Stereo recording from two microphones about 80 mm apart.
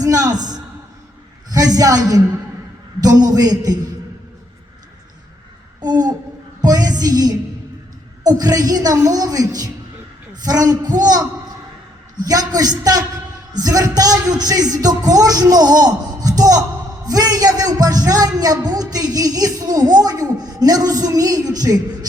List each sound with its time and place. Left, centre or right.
0.0 s a sound: right
1.5 s a woman's voice: right
5.8 s a woman's voice: right